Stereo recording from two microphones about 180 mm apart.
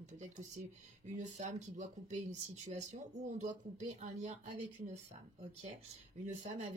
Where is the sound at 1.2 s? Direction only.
40° right (ahead or behind).